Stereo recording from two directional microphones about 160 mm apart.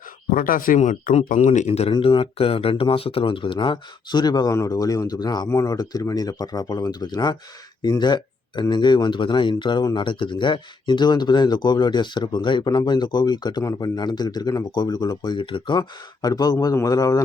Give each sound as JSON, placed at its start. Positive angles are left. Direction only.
{"t": 0.3, "sound": "speech", "side_deg": 60}